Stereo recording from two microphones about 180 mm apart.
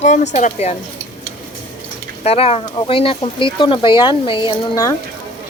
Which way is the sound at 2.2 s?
35° left (ahead or behind).